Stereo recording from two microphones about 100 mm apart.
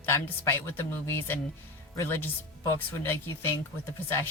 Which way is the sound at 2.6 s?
25° left (ahead or behind).